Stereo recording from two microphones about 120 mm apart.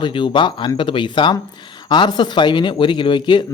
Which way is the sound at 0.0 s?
45° left (ahead or behind).